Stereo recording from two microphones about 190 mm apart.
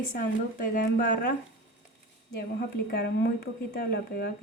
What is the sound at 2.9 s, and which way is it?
Speech, 65° left (ahead or behind).